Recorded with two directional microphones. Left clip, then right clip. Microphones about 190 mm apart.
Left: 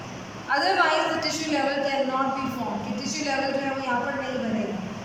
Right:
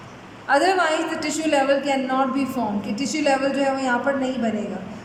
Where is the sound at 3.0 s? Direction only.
45° right (ahead or behind).